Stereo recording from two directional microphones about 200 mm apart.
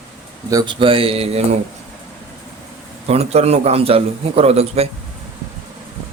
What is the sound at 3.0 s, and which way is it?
A man's voice, 30° right (ahead or behind).